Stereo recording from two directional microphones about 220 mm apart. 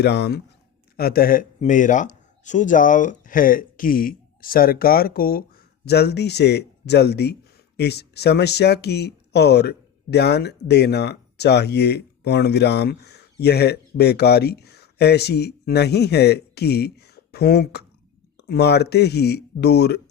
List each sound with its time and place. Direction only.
0.0 s speech: 50° left (ahead or behind)